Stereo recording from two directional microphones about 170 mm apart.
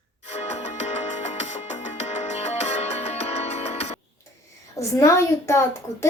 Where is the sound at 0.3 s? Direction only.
40° left (ahead or behind).